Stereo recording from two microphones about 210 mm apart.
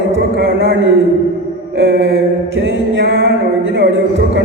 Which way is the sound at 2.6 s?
55° right (ahead or behind).